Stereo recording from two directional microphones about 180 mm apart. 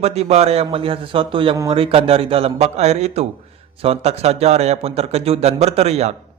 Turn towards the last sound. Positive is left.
turn(degrees=-35)  # may be behind; listen again after turning